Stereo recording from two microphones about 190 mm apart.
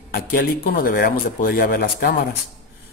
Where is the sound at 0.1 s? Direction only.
50° left (ahead or behind).